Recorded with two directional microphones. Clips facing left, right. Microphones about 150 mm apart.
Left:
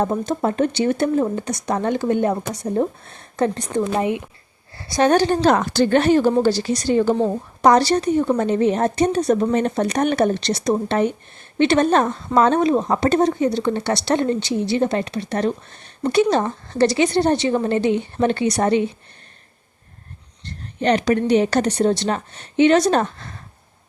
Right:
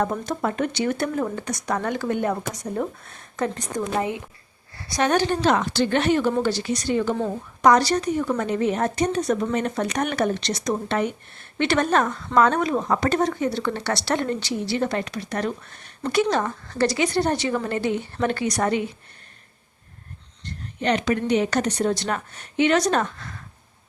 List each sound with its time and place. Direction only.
0.0 s a woman's voice: 25° left (ahead or behind)
3.8 s speech: 20° left (ahead or behind)
4.8 s a woman's voice: 30° left (ahead or behind)
20.8 s a woman's voice: 35° left (ahead or behind)